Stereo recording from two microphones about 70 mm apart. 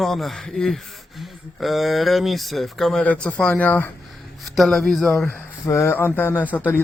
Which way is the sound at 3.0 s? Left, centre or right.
Centre.